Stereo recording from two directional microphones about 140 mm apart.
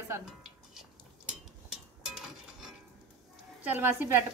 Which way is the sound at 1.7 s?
5° right (ahead or behind).